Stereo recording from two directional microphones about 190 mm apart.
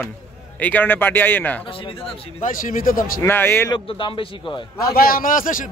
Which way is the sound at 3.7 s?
25° left (ahead or behind).